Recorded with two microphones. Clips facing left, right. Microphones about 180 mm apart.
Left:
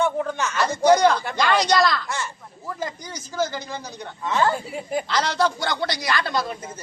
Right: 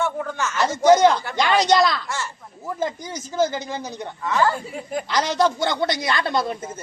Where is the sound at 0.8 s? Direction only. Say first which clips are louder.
Right 2 dB; 20° right (ahead or behind).